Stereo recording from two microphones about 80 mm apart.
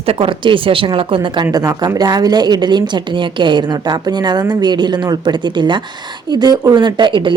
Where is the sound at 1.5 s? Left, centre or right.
Right.